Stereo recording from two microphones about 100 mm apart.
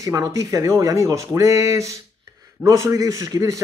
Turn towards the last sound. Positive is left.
turn(degrees=-35)  # may be behind; listen again after turning